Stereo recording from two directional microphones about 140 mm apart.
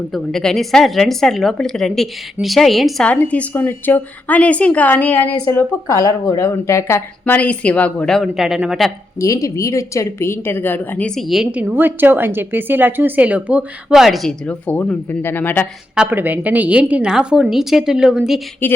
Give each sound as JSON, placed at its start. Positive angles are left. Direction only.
{"t": 0.1, "sound": "a woman's voice", "side_deg": 0}
{"t": 9.1, "sound": "a woman's voice", "side_deg": 25}
{"t": 11.6, "sound": "a woman's voice", "side_deg": -15}
{"t": 16.0, "sound": "a woman's voice", "side_deg": -15}